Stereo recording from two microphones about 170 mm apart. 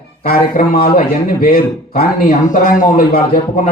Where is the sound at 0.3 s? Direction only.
60° left (ahead or behind).